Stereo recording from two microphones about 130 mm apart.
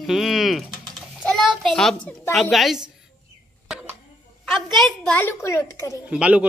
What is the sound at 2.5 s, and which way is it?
Speech, centre (ahead or behind).